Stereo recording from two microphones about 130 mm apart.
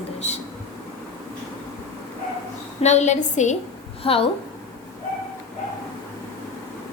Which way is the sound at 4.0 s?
45° left (ahead or behind).